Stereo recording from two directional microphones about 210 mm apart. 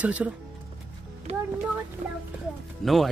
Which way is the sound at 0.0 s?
5° right (ahead or behind).